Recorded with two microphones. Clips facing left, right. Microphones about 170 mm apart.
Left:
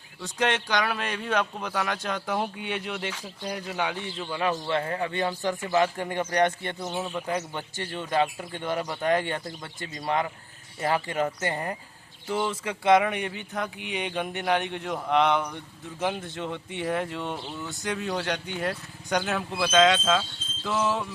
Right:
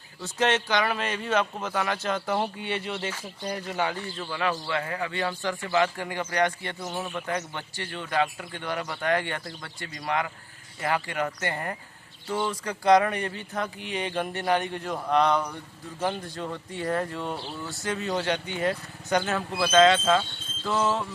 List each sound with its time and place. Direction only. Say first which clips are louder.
0.2 s speech: right 2 dB; 5° right (ahead or behind)
4.3 s speech: left 2 dB; 20° left (ahead or behind)
12.3 s speech: left 1 dB; 10° left (ahead or behind)